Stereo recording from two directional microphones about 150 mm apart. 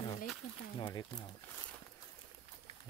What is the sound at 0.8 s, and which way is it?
Speech, 25° left (ahead or behind).